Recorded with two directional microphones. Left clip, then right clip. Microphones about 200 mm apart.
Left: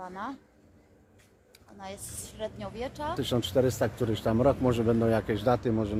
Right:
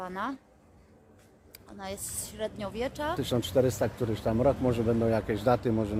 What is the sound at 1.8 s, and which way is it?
Speech, 30° right (ahead or behind).